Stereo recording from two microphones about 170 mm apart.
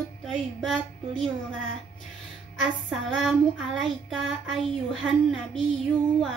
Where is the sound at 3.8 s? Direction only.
Centre (ahead or behind).